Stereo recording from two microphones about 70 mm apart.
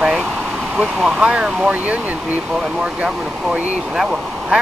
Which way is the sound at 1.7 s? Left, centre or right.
Right.